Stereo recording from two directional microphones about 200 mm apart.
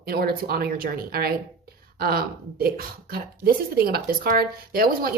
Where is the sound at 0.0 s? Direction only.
50° right (ahead or behind).